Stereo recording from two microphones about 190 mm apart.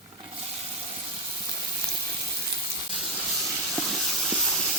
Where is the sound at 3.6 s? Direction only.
Centre (ahead or behind).